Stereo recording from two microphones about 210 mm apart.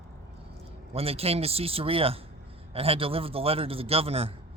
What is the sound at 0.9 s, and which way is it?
A man's voice, 30° right (ahead or behind).